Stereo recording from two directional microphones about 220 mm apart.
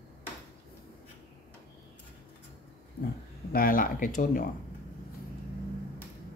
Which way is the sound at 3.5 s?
40° left (ahead or behind).